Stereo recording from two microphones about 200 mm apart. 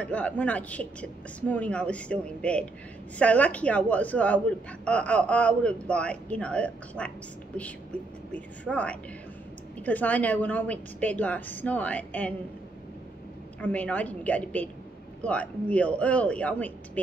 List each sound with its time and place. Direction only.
0.0 s a woman's voice: 5° left (ahead or behind)
8.3 s a woman's voice: 5° left (ahead or behind)
13.6 s a woman's voice: 5° left (ahead or behind)